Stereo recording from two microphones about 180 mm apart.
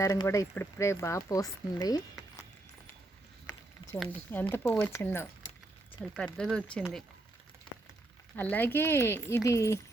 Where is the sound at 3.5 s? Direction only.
20° left (ahead or behind).